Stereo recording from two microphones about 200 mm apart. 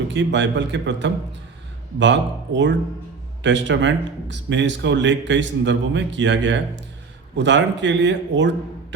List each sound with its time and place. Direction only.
0.1 s speech: 60° right (ahead or behind)